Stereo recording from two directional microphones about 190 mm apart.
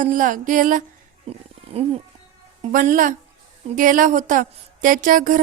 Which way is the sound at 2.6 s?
40° right (ahead or behind).